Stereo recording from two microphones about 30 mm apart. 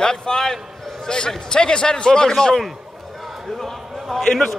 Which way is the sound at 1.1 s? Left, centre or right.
Left.